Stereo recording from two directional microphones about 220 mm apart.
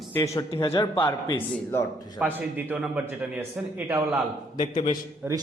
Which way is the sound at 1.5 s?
10° left (ahead or behind).